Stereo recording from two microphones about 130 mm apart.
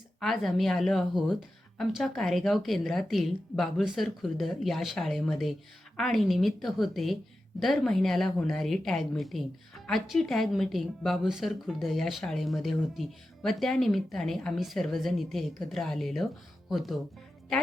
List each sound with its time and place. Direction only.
0.2 s a woman's voice: centre (ahead or behind)